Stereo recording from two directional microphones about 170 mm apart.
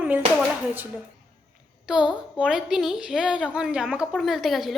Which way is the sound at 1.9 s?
5° right (ahead or behind).